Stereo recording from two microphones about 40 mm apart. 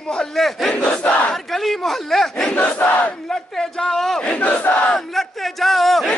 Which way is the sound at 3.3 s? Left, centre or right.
Centre.